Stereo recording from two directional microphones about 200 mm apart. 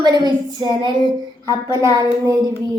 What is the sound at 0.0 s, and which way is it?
A woman's voice, 20° right (ahead or behind).